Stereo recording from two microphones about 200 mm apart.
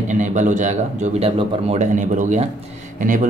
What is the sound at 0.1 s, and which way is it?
Speech, 40° right (ahead or behind).